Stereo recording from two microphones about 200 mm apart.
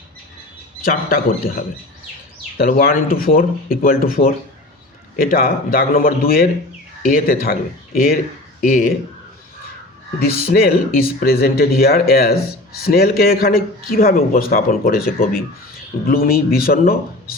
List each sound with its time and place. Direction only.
0.9 s speech: 45° left (ahead or behind)
10.2 s speech: 50° left (ahead or behind)